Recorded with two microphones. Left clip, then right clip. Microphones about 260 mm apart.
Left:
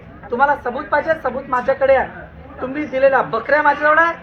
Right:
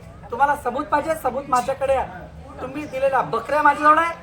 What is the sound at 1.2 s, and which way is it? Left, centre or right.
Speech, centre.